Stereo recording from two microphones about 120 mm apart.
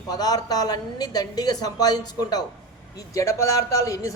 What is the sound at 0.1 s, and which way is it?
A woman's voice, 35° left (ahead or behind).